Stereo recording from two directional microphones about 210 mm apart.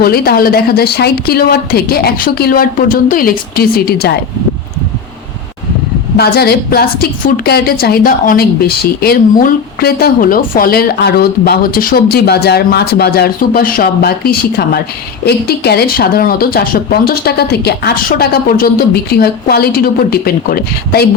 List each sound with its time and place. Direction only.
0.0 s a woman's voice: 45° left (ahead or behind)
6.1 s a woman's voice: 50° left (ahead or behind)